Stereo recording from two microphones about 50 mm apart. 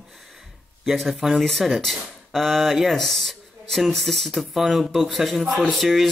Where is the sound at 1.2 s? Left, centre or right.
Centre.